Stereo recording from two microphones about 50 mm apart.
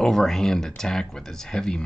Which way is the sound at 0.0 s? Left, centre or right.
Centre.